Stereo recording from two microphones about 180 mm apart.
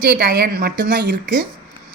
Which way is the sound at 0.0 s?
60° right (ahead or behind).